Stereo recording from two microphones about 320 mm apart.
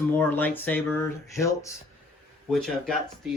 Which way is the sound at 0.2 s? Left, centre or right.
Centre.